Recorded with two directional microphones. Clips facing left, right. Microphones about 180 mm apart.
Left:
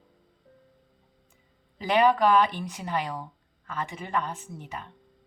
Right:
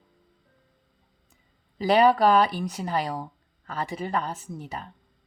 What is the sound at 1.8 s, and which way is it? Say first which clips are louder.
Speech: right 3 dB; 35° right (ahead or behind).